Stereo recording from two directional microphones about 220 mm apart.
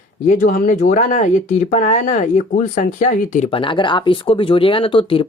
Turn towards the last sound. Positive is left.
turn(degrees=25)  # may be behind; listen again after turning